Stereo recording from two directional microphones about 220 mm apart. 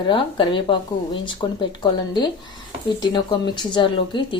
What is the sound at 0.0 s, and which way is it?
A woman's voice, 20° left (ahead or behind).